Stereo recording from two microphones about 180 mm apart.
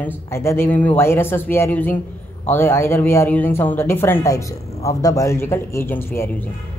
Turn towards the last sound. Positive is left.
turn(degrees=15)  # may be behind; listen again after turning